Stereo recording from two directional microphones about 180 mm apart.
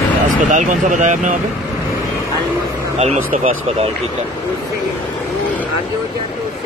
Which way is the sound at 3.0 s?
35° right (ahead or behind).